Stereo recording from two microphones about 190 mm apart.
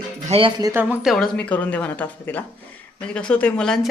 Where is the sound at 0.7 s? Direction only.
10° right (ahead or behind).